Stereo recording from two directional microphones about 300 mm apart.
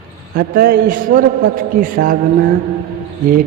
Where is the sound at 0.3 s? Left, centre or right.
Right.